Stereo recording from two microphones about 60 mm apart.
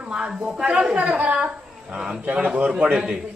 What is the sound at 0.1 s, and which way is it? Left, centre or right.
A man's voice, centre.